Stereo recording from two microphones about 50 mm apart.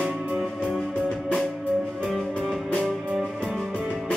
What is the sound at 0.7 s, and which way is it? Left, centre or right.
Music, centre.